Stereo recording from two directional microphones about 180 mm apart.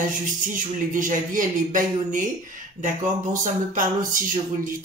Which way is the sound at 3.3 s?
45° right (ahead or behind).